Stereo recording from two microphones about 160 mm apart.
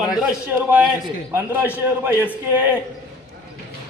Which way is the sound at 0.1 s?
5° right (ahead or behind).